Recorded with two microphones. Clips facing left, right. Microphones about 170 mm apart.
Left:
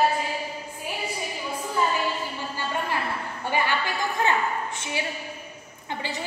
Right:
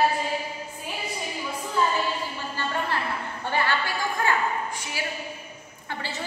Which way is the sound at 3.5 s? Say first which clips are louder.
Even; 15° left (ahead or behind).